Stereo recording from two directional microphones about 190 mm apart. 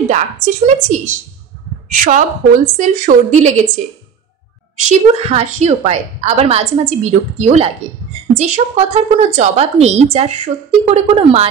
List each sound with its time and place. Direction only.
0.7 s a woman's voice: 40° right (ahead or behind)
4.7 s a woman's voice: 35° right (ahead or behind)